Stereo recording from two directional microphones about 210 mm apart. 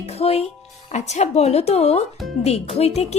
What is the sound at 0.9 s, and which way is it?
A woman's voice, 30° left (ahead or behind).